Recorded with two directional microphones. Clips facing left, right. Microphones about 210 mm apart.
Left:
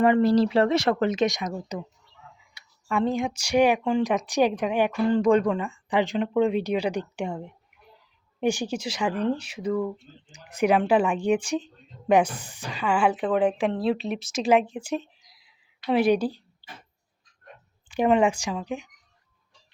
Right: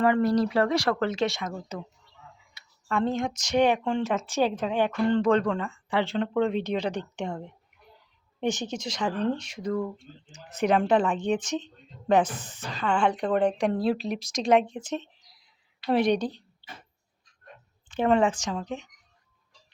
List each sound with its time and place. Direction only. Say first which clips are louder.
0.0 s speech: left 3 dB; 25° left (ahead or behind)
2.9 s speech: left 2 dB; 10° left (ahead or behind)
17.8 s speech: left 2 dB; 10° left (ahead or behind)